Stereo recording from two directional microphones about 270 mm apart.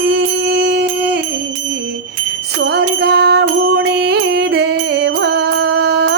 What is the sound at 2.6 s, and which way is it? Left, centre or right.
Music, right.